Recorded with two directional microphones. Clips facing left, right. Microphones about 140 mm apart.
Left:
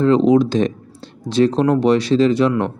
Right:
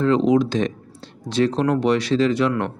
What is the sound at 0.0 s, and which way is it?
Speech, 35° left (ahead or behind).